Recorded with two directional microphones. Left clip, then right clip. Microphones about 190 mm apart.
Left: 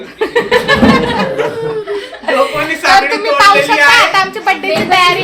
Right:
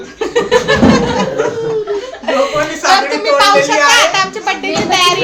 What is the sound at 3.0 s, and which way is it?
Speech, 20° left (ahead or behind).